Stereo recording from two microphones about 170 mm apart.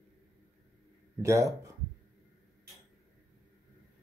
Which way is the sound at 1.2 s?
20° right (ahead or behind).